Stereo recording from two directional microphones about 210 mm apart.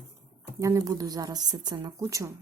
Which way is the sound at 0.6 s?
15° right (ahead or behind).